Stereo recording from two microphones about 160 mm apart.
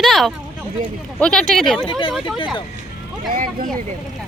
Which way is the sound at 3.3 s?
60° right (ahead or behind).